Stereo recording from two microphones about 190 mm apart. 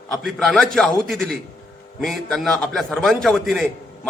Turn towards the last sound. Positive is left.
turn(degrees=0)  # may be behind; listen again after turning